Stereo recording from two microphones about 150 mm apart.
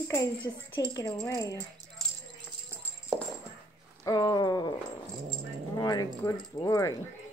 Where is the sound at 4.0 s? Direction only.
25° left (ahead or behind).